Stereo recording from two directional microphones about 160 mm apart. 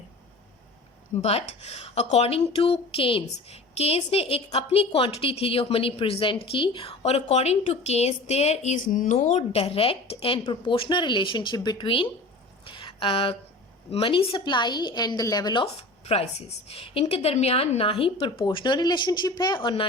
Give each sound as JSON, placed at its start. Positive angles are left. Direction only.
{"t": 1.2, "sound": "a woman's voice", "side_deg": 40}
{"t": 9.1, "sound": "a woman's voice", "side_deg": 40}
{"t": 12.6, "sound": "a sound", "side_deg": 30}
{"t": 13.9, "sound": "a woman's voice", "side_deg": 35}
{"t": 15.6, "sound": "a woman's voice", "side_deg": 40}